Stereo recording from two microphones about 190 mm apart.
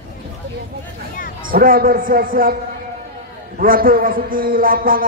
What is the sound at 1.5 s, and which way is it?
A man's voice, 50° right (ahead or behind).